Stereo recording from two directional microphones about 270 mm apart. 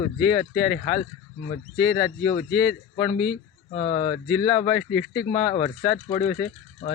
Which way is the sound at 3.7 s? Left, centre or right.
Centre.